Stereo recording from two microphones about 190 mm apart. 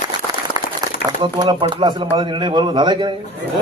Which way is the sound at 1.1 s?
25° right (ahead or behind).